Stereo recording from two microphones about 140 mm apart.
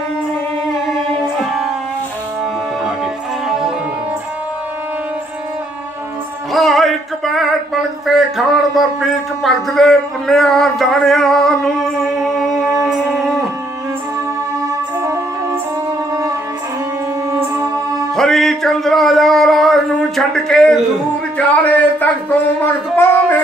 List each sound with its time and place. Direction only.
1.2 s music: centre (ahead or behind)
3.4 s music: 5° right (ahead or behind)
6.5 s a sound: centre (ahead or behind)
15.0 s music: 20° right (ahead or behind)
17.3 s music: 20° right (ahead or behind)
18.1 s music: 5° left (ahead or behind)